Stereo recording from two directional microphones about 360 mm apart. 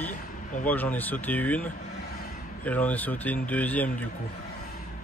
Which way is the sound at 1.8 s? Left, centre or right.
Left.